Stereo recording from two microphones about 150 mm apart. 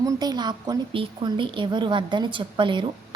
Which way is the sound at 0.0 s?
25° right (ahead or behind).